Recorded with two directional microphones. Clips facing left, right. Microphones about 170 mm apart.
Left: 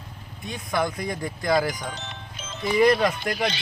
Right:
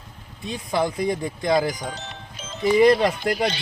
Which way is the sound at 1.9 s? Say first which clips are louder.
Right 1 dB; 40° right (ahead or behind).